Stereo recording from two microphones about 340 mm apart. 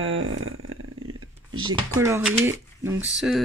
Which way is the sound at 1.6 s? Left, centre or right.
Centre.